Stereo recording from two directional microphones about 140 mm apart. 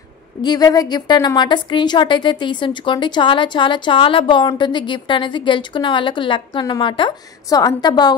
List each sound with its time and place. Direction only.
0.4 s a woman's voice: 30° left (ahead or behind)